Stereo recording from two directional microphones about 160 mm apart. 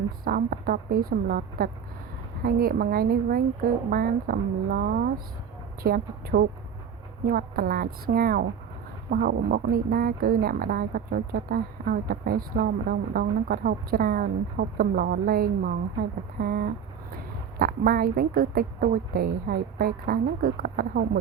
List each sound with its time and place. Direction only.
0.3 s speech: 70° right (ahead or behind)